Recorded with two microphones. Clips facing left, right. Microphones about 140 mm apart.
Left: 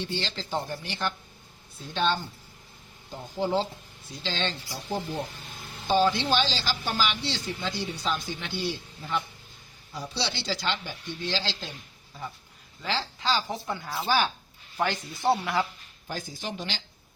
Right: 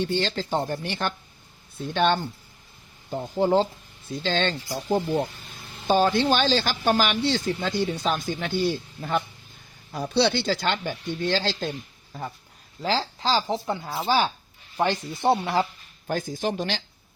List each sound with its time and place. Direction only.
0.0 s speech: 50° right (ahead or behind)
3.3 s speech: 45° right (ahead or behind); by 15.4 s 20° right (ahead or behind)
16.0 s speech: 50° right (ahead or behind)